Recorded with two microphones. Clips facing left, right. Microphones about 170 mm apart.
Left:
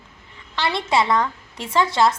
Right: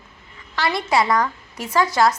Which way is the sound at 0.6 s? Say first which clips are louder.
Right 1 dB; 25° left (ahead or behind).